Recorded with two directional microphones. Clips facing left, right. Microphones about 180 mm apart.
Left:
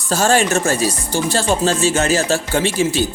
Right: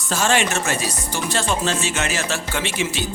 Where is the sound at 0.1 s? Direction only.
40° left (ahead or behind).